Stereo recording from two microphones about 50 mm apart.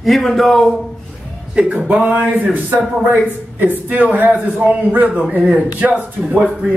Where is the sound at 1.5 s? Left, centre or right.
Centre.